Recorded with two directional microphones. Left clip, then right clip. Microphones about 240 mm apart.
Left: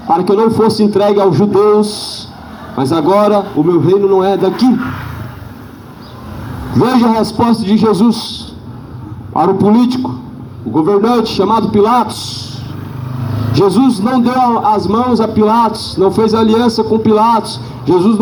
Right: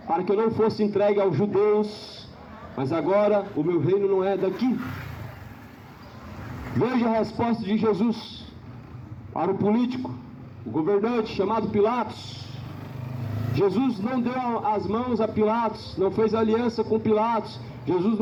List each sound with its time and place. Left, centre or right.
0.1 s a man's voice: left
6.7 s a man's voice: left
9.3 s a man's voice: left
13.5 s a man's voice: left